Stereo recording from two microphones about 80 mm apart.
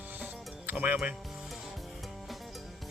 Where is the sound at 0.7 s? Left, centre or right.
Centre.